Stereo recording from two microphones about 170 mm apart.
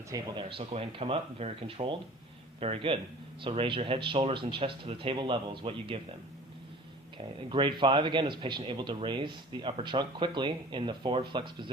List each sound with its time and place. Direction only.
0.3 s speech: 35° right (ahead or behind)
7.2 s a man's voice: 30° right (ahead or behind)